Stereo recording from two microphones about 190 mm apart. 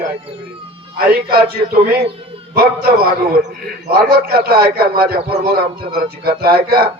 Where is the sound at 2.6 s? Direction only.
50° right (ahead or behind).